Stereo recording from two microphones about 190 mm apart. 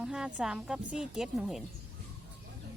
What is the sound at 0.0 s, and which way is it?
A woman's voice, 5° right (ahead or behind).